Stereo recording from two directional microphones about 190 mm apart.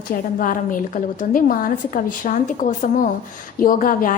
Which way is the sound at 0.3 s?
45° left (ahead or behind).